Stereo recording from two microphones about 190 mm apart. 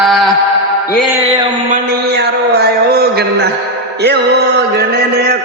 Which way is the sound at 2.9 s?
55° right (ahead or behind).